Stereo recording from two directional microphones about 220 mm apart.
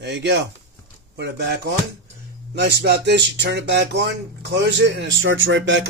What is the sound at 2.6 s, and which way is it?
Speech, 50° right (ahead or behind).